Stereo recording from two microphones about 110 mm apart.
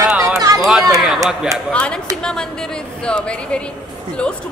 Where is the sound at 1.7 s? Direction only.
10° left (ahead or behind).